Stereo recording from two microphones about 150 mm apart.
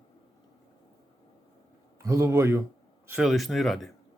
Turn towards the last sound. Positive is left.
turn(degrees=0)  # may be behind; listen again after turning